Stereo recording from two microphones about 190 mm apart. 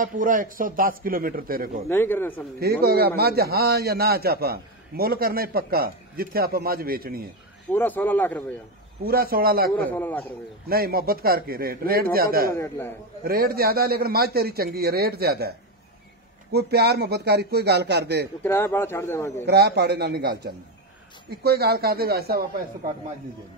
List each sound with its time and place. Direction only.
0.0 s a man's voice: 45° right (ahead or behind)
1.9 s speech: 10° left (ahead or behind)
2.6 s a man's voice: 55° right (ahead or behind)
7.7 s speech: 10° left (ahead or behind)
9.0 s a man's voice: 50° right (ahead or behind)
9.8 s speech: 10° left (ahead or behind)
10.7 s a man's voice: 50° right (ahead or behind)
12.5 s speech: 15° left (ahead or behind)
13.2 s a man's voice: 50° right (ahead or behind)
16.5 s speech: 60° right (ahead or behind)
18.4 s speech: 15° left (ahead or behind)
19.4 s speech: 60° right (ahead or behind)